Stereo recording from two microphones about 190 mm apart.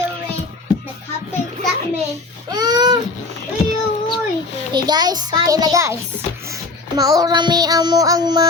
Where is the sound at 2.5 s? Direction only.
20° right (ahead or behind).